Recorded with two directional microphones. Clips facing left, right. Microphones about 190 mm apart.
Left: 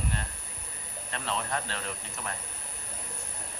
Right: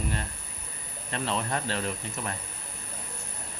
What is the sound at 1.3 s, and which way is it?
Speech, 30° right (ahead or behind).